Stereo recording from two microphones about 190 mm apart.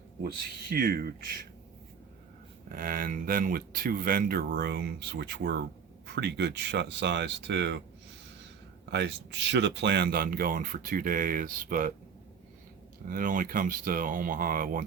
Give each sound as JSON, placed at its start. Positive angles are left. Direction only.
{"t": 0.7, "sound": "speech", "side_deg": -55}
{"t": 2.7, "sound": "speech", "side_deg": -50}
{"t": 8.9, "sound": "speech", "side_deg": -65}
{"t": 13.1, "sound": "speech", "side_deg": -45}